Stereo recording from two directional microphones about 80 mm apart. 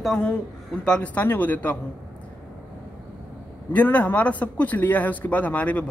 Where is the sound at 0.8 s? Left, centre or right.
Centre.